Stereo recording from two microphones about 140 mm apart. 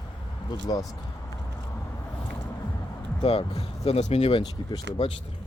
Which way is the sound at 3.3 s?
45° left (ahead or behind).